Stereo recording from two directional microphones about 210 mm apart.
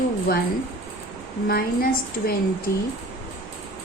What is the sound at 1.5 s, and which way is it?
Speech, 45° left (ahead or behind).